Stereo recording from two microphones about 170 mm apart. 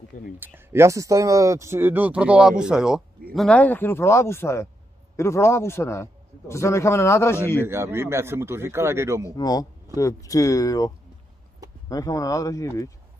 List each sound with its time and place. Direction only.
0.4 s speech: 15° right (ahead or behind)
3.3 s a man's voice: 5° left (ahead or behind)
7.6 s speech: 15° right (ahead or behind)
9.4 s speech: 25° left (ahead or behind)
11.9 s speech: 20° left (ahead or behind)